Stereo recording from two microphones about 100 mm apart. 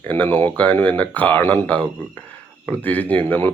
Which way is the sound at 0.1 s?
20° left (ahead or behind).